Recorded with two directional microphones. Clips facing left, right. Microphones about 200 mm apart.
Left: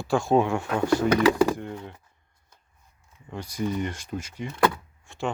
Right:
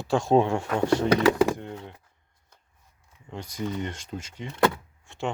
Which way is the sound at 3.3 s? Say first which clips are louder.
Left 3 dB; 20° right (ahead or behind).